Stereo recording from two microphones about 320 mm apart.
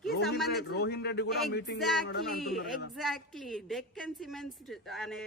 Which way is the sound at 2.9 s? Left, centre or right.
Centre.